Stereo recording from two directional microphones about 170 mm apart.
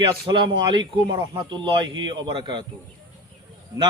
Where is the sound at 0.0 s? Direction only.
30° right (ahead or behind).